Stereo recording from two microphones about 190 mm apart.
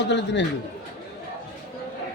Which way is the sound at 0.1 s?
65° left (ahead or behind).